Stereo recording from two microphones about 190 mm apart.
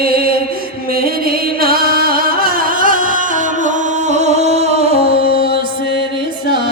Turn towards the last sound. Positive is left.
turn(degrees=55)  # may be behind; listen again after turning